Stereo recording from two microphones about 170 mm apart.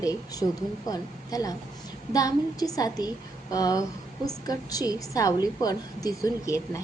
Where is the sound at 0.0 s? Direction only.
20° left (ahead or behind).